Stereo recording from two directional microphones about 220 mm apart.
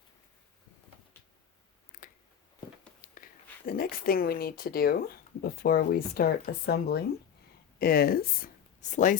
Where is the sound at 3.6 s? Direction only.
40° left (ahead or behind).